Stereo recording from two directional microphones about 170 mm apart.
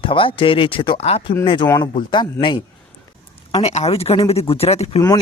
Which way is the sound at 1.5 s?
25° left (ahead or behind).